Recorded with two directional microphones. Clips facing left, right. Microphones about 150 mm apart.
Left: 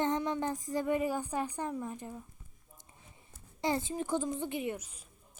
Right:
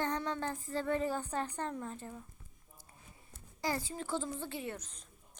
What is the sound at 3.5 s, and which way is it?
A woman's voice, 20° left (ahead or behind).